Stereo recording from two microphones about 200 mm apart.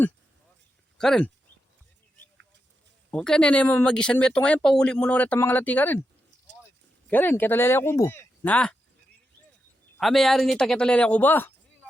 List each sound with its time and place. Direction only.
0.9 s speech: 5° left (ahead or behind)
3.1 s speech: 5° left (ahead or behind)
7.1 s speech: 10° left (ahead or behind)
10.0 s speech: centre (ahead or behind)